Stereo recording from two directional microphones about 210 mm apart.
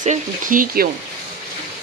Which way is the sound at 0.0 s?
40° right (ahead or behind).